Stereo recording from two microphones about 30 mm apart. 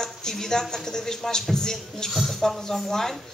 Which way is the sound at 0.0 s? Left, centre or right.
Centre.